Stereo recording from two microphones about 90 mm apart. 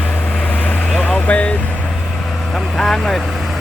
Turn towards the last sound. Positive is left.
turn(degrees=5)  # may be behind; listen again after turning